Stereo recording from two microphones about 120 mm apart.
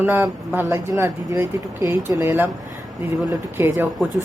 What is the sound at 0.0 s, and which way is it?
Speech, 15° right (ahead or behind).